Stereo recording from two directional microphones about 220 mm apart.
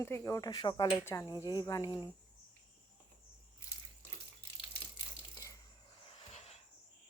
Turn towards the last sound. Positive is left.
turn(degrees=30)  # may be behind; listen again after turning